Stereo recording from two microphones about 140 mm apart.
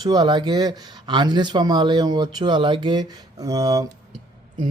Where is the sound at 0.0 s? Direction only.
30° right (ahead or behind).